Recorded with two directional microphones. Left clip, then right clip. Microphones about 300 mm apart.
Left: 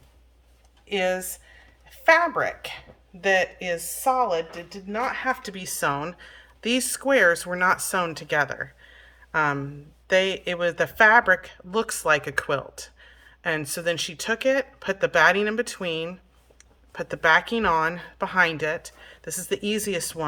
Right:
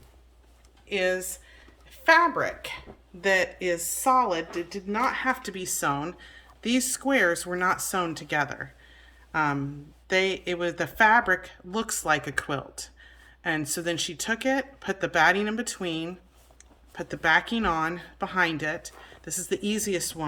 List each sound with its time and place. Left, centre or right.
0.9 s a woman's voice: centre